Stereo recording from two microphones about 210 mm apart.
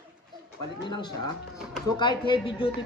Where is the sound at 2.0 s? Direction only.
20° left (ahead or behind).